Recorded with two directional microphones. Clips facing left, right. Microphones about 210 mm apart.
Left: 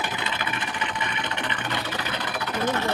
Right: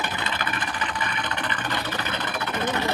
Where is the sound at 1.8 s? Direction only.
5° left (ahead or behind).